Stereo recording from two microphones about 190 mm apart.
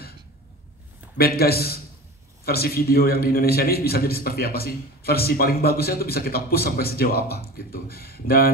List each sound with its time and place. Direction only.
1.1 s a man's voice: 55° left (ahead or behind)